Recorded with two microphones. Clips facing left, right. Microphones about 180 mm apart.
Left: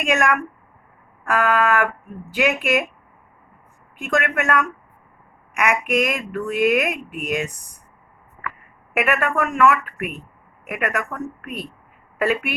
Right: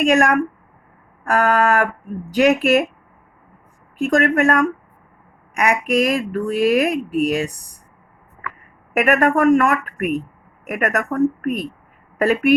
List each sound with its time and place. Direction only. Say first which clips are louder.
0.0 s speech: right 5 dB; 35° right (ahead or behind)
3.9 s speech: right 6 dB; 35° right (ahead or behind)
8.9 s a woman's voice: right 5 dB; 40° right (ahead or behind)